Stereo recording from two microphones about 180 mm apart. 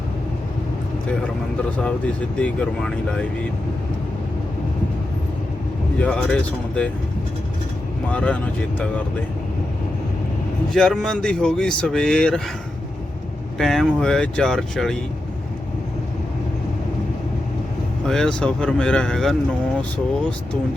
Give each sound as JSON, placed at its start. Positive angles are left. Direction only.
{"t": 2.4, "sound": "speech", "side_deg": 5}
{"t": 6.0, "sound": "speech", "side_deg": 5}
{"t": 8.1, "sound": "speech", "side_deg": 5}
{"t": 10.7, "sound": "speech", "side_deg": 5}
{"t": 13.6, "sound": "speech", "side_deg": 0}
{"t": 18.1, "sound": "speech", "side_deg": 5}